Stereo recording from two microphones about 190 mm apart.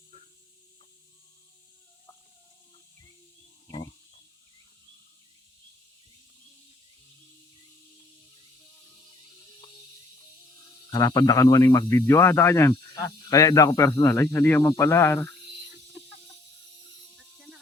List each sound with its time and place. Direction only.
3.7 s wild animals: 30° left (ahead or behind)
10.8 s speech: 20° left (ahead or behind)
17.3 s a sound: centre (ahead or behind)